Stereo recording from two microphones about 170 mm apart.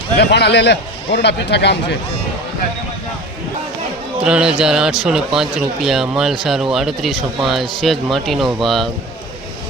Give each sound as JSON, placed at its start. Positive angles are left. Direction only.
{"t": 0.2, "sound": "a man's voice", "side_deg": 80}
{"t": 4.2, "sound": "speech", "side_deg": -5}